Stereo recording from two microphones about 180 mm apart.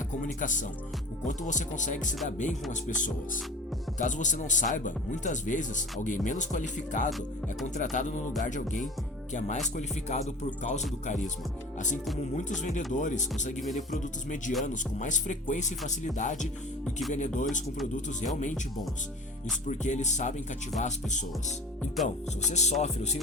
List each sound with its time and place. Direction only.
0.2 s speech: 45° left (ahead or behind)
12.4 s speech: 45° left (ahead or behind)
19.6 s speech: 40° left (ahead or behind)